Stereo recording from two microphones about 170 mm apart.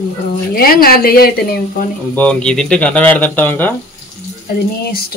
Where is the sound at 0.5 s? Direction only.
60° left (ahead or behind).